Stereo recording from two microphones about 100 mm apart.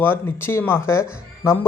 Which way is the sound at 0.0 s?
20° left (ahead or behind).